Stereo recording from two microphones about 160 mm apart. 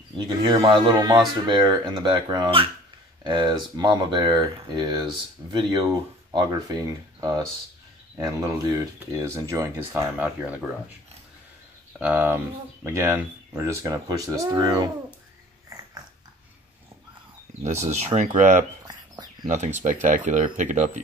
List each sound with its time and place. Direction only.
0.4 s speech: 25° right (ahead or behind); by 10.5 s 10° right (ahead or behind)
12.0 s speech: 10° right (ahead or behind)
17.6 s speech: 45° right (ahead or behind)